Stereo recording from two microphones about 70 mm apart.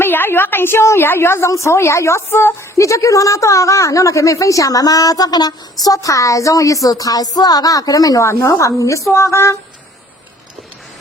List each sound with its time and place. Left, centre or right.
0.0 s a woman's voice: left